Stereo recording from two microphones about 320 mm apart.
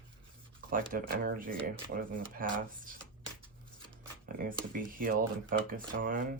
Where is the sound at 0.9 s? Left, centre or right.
Right.